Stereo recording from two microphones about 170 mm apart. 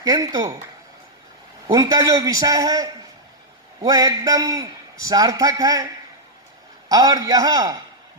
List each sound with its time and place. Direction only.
0.0 s a man's voice: 20° right (ahead or behind)
1.6 s a man's voice: 20° right (ahead or behind)